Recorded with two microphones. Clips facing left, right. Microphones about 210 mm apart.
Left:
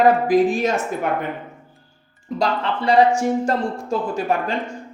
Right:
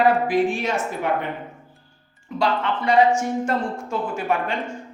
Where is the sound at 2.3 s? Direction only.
35° left (ahead or behind).